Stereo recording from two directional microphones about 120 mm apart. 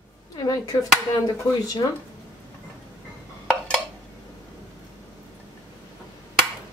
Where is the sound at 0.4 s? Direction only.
30° left (ahead or behind).